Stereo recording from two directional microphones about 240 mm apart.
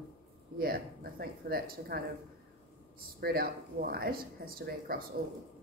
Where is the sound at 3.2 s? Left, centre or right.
Right.